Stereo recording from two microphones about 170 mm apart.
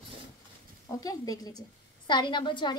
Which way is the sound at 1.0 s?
20° left (ahead or behind).